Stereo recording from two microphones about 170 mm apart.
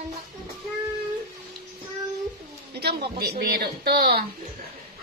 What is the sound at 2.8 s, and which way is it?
Speech, 70° right (ahead or behind).